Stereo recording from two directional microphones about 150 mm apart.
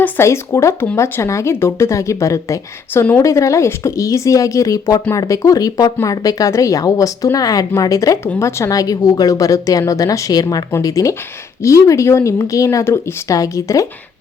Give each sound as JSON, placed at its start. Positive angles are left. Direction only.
{"t": 0.0, "sound": "speech", "side_deg": 20}